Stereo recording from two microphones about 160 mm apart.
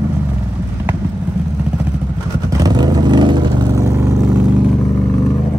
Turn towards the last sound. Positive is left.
turn(degrees=-20)  # may be behind; listen again after turning